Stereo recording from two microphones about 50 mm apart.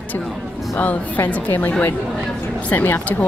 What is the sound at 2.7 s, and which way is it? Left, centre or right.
Speech, left.